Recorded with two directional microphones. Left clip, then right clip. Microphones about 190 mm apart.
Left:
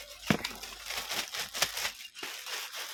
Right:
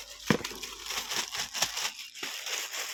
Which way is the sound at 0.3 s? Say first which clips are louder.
Right 2 dB; 5° left (ahead or behind).